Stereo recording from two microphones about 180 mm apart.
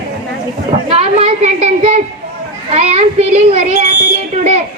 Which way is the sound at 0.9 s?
35° right (ahead or behind).